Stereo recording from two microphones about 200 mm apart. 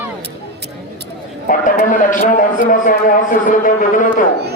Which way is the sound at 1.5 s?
40° left (ahead or behind).